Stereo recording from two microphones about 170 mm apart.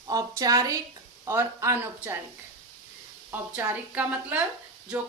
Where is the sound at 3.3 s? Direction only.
10° right (ahead or behind).